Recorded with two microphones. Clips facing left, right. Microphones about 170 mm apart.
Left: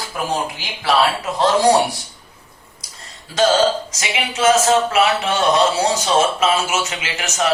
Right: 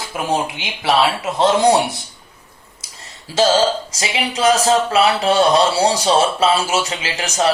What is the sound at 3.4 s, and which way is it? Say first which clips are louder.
Speech: even; 30° right (ahead or behind).